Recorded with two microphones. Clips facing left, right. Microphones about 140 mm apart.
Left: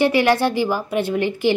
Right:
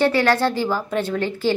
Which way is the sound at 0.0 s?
15° left (ahead or behind).